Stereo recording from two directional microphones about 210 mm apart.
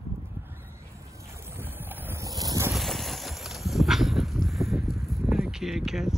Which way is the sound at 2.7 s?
Centre (ahead or behind).